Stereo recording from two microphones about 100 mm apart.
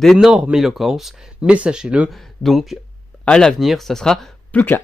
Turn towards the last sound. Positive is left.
turn(degrees=15)  # may be behind; listen again after turning